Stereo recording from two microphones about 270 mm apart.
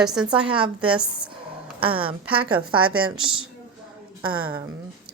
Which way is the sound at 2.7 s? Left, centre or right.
Right.